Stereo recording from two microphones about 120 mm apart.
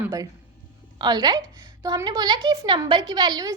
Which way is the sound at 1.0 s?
35° right (ahead or behind).